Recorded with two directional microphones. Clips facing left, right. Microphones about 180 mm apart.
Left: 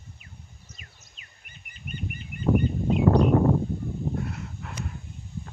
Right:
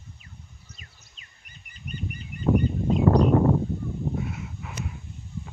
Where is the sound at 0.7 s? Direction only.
35° right (ahead or behind).